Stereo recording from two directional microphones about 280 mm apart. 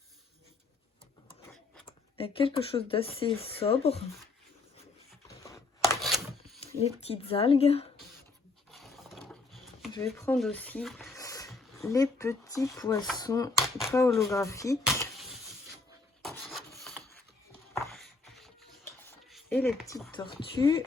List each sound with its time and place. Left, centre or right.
2.1 s speech: centre
5.3 s chopping: centre
6.0 s a sound: centre
6.6 s speech: left
8.7 s a sound: centre
10.2 s speech: centre
11.1 s a sound: centre
11.8 s speech: centre
13.6 s speech: centre
14.2 s speech: centre
16.2 s rub: centre
17.9 s a sound: centre
20.1 s speech: centre